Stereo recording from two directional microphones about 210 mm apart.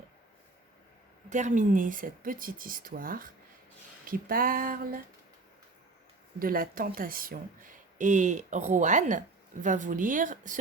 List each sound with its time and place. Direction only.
1.3 s speech: 35° right (ahead or behind)
4.0 s a sound: 40° right (ahead or behind)
6.4 s speech: 45° right (ahead or behind)